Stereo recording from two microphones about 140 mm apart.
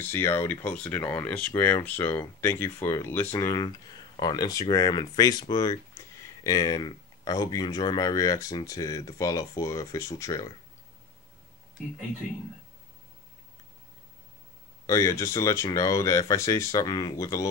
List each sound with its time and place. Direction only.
0.0 s speech: 15° left (ahead or behind)
14.9 s speech: 20° left (ahead or behind)